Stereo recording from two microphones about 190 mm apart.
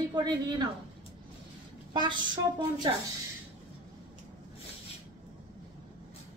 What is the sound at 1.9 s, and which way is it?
Speech, 25° right (ahead or behind).